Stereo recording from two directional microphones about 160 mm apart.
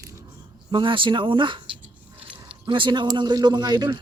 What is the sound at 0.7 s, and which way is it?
Speech, 30° right (ahead or behind).